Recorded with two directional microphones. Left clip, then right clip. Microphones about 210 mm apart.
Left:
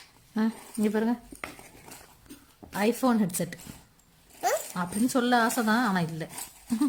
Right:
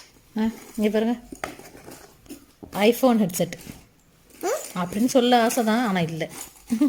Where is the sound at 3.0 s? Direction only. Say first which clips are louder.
Right 6 dB; 15° left (ahead or behind).